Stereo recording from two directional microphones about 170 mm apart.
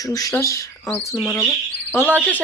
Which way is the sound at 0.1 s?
20° left (ahead or behind).